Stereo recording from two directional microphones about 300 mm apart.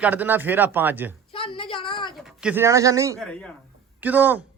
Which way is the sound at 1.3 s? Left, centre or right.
Centre.